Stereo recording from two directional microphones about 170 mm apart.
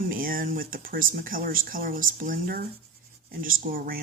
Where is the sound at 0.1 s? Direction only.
55° right (ahead or behind).